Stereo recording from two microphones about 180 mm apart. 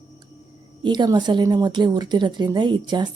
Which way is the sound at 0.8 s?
25° right (ahead or behind).